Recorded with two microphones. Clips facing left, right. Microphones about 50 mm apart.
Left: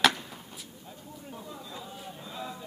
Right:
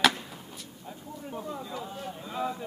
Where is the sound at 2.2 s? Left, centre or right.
Right.